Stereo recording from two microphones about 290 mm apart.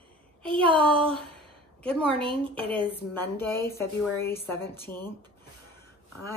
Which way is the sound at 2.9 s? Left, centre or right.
Centre.